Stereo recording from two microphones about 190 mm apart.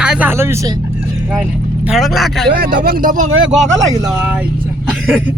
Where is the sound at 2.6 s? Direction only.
50° right (ahead or behind).